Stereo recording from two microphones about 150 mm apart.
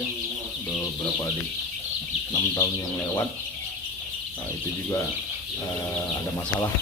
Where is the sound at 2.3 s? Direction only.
20° left (ahead or behind).